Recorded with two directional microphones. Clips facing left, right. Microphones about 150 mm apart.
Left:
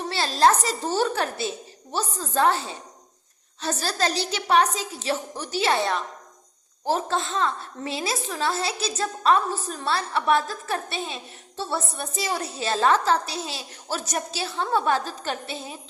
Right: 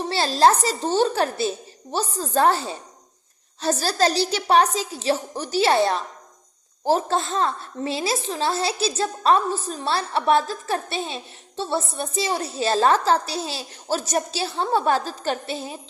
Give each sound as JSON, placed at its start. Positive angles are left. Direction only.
{"t": 0.1, "sound": "a woman's voice", "side_deg": -35}
{"t": 3.6, "sound": "a woman's voice", "side_deg": -35}